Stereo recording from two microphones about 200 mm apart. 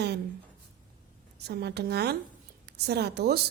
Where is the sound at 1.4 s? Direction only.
55° right (ahead or behind).